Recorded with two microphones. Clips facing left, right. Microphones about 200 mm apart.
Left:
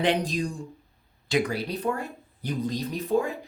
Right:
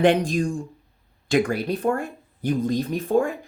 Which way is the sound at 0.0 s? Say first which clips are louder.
Right 6 dB; 50° right (ahead or behind).